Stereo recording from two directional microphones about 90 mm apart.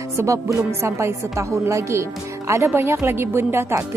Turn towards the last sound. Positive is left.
turn(degrees=-25)  # may be behind; listen again after turning